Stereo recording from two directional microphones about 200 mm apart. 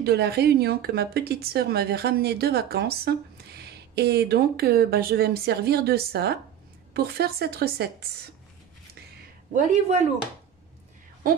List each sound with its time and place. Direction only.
0.0 s a woman's voice: 50° right (ahead or behind)
9.5 s speech: 40° right (ahead or behind)